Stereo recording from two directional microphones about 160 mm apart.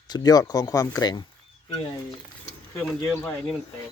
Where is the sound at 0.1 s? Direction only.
25° left (ahead or behind).